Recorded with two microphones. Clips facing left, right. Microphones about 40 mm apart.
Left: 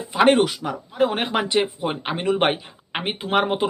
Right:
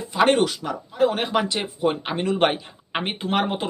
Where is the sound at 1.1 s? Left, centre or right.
Left.